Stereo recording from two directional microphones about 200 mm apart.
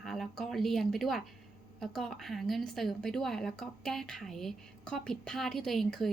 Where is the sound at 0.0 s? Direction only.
Centre (ahead or behind).